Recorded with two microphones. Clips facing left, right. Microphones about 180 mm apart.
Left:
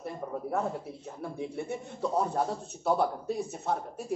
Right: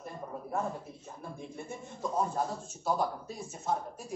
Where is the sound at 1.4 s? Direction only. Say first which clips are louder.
Left 9 dB; 70° left (ahead or behind).